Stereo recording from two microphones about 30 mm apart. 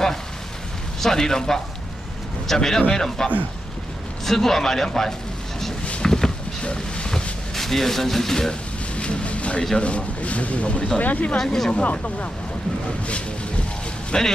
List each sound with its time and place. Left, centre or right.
1.0 s a man's voice: centre
4.3 s speech: centre
6.0 s a sound: centre
6.6 s a sound: left
7.5 s speech: centre
8.9 s vehicle: left
9.8 s speech: left
11.0 s speech: left
11.3 s speech: centre
11.8 s speech: left
14.1 s a man's voice: left